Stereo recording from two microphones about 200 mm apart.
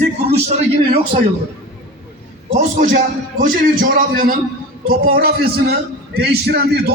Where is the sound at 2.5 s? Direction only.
40° right (ahead or behind).